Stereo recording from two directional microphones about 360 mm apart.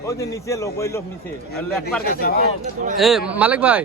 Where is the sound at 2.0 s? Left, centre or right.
Left.